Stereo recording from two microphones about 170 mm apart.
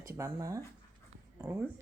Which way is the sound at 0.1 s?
15° right (ahead or behind).